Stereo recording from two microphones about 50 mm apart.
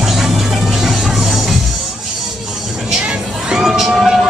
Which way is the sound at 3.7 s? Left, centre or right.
Centre.